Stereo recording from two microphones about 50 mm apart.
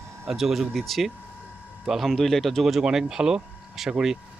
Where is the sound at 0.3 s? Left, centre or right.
Centre.